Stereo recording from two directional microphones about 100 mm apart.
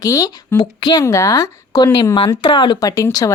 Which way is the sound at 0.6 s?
50° left (ahead or behind).